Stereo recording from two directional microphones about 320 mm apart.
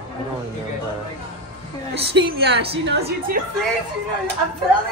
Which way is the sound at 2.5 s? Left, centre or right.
Right.